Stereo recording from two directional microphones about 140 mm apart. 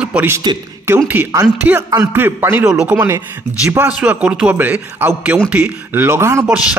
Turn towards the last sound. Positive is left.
turn(degrees=-20)  # may be behind; listen again after turning